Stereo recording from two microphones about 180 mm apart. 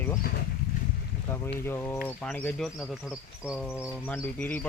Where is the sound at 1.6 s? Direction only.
15° left (ahead or behind).